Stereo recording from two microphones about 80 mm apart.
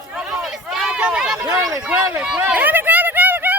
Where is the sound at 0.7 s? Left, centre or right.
Centre.